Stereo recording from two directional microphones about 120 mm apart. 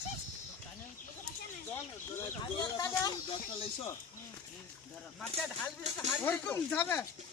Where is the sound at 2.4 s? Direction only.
30° left (ahead or behind).